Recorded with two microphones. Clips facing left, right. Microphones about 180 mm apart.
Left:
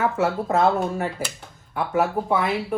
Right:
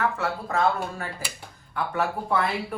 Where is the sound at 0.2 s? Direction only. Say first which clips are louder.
Left 5 dB; 20° left (ahead or behind).